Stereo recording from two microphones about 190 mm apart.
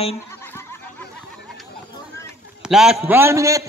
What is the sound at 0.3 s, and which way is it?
Goat, 10° left (ahead or behind).